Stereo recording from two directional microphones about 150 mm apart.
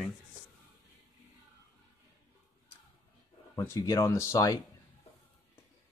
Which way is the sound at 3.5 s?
20° left (ahead or behind).